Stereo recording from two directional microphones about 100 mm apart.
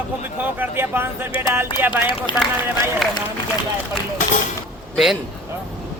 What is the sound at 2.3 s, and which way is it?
Speech, 55° left (ahead or behind).